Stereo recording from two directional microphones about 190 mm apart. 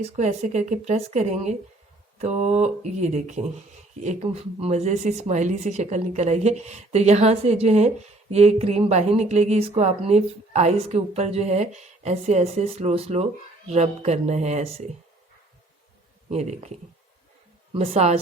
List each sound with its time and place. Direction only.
0.2 s speech: 40° right (ahead or behind)
16.3 s speech: 35° right (ahead or behind)
17.7 s speech: 35° right (ahead or behind)